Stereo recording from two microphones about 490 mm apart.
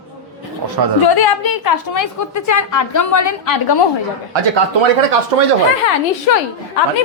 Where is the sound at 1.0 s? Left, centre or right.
Left.